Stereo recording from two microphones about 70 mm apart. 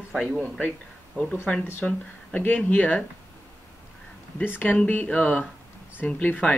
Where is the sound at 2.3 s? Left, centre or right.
Left.